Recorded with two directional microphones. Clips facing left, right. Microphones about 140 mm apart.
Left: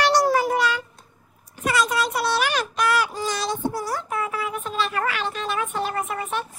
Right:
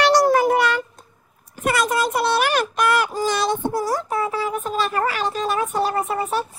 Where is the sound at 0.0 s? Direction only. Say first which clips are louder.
Right 3 dB; 80° right.